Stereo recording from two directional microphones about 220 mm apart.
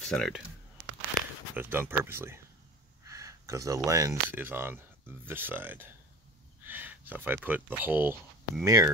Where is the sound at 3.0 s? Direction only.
15° right (ahead or behind).